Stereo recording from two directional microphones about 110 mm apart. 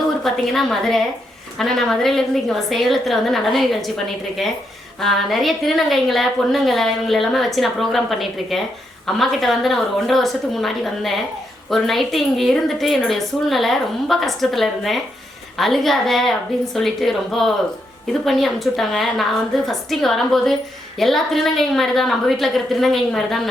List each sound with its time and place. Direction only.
0.2 s a woman's voice: 5° left (ahead or behind)